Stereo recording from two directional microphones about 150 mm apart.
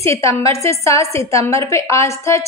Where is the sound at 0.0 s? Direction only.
20° left (ahead or behind).